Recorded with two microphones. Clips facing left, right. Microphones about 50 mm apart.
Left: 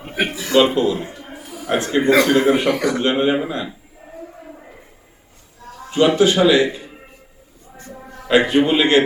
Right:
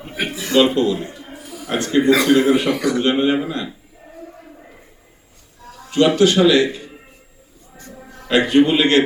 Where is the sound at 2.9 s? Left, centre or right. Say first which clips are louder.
Right 1 dB; centre.